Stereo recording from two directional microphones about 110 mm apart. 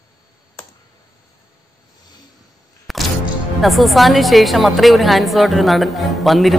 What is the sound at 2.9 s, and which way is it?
Music, centre (ahead or behind).